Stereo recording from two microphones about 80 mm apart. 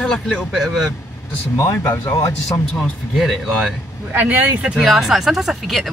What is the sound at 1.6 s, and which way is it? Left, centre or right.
Speech, left.